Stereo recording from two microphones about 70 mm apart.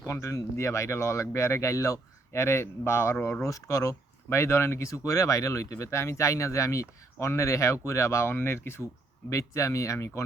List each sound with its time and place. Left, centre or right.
0.0 s speech: left
3.4 s speech: left